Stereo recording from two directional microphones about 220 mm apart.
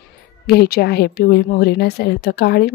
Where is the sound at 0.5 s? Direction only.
45° left (ahead or behind).